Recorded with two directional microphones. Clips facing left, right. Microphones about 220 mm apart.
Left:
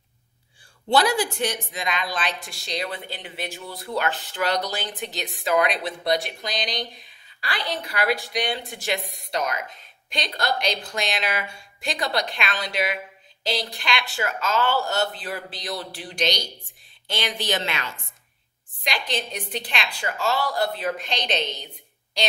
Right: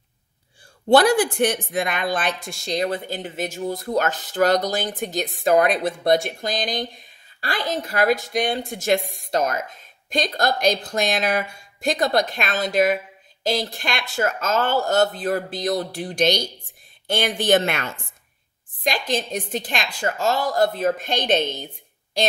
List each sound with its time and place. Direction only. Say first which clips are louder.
0.8 s speech: right 6 dB; 50° right (ahead or behind)